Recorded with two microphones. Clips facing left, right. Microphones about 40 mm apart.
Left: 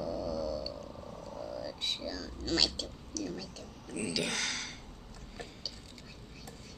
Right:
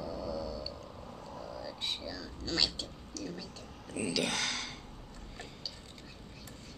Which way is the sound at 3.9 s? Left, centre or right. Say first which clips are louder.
Right 1 dB; centre.